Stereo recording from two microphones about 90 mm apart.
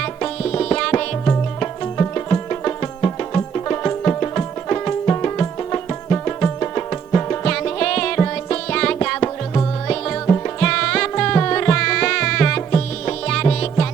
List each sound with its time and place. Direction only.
0.0 s music: 10° left (ahead or behind)
7.4 s music: 10° left (ahead or behind)
10.6 s music: 10° left (ahead or behind)